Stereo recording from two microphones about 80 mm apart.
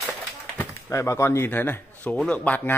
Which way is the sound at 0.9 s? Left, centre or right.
Left.